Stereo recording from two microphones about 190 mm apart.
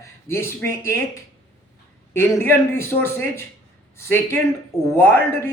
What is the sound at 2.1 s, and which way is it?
A man's voice, 10° left (ahead or behind).